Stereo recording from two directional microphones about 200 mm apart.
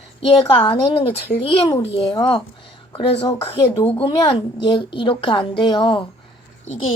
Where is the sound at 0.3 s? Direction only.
25° left (ahead or behind).